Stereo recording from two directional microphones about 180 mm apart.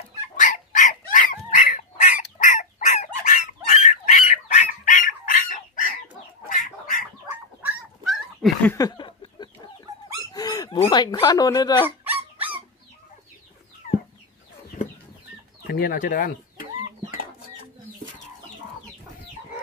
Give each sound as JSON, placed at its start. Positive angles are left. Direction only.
{"t": 0.4, "sound": "dog", "side_deg": 45}
{"t": 3.8, "sound": "fowl", "side_deg": 45}
{"t": 6.5, "sound": "bird", "side_deg": 50}
{"t": 7.2, "sound": "dog", "side_deg": -5}
{"t": 8.6, "sound": "a sound", "side_deg": 20}
{"t": 10.3, "sound": "dog", "side_deg": 20}
{"t": 10.8, "sound": "speech", "side_deg": 25}
{"t": 12.0, "sound": "dog", "side_deg": -10}
{"t": 15.6, "sound": "speech", "side_deg": 55}